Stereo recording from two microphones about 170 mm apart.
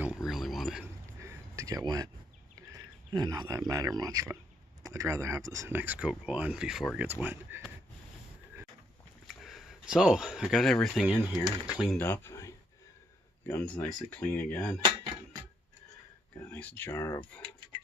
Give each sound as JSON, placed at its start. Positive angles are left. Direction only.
{"t": 0.0, "sound": "a sound", "side_deg": -5}
{"t": 1.2, "sound": "a sound", "side_deg": -20}
{"t": 2.7, "sound": "speech", "side_deg": -20}
{"t": 9.3, "sound": "speech", "side_deg": 0}
{"t": 12.0, "sound": "speech", "side_deg": 15}
{"t": 16.3, "sound": "speech", "side_deg": 10}